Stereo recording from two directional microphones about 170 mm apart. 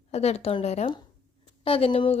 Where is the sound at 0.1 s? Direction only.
40° left (ahead or behind).